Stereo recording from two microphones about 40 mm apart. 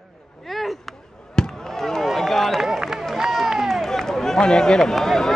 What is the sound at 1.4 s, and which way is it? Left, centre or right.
Fireworks, centre.